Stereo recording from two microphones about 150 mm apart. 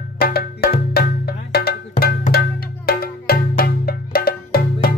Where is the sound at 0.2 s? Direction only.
90° left.